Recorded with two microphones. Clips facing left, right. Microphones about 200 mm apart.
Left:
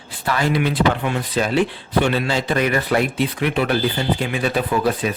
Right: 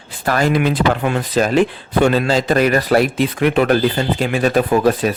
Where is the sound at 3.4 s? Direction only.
50° right (ahead or behind).